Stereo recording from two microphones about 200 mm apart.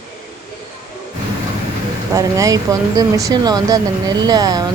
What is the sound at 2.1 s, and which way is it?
Speech, 15° right (ahead or behind).